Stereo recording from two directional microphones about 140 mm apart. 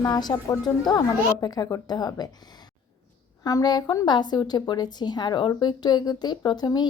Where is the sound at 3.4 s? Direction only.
30° left (ahead or behind).